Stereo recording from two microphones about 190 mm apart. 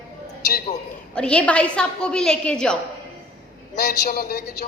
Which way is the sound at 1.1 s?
5° left (ahead or behind).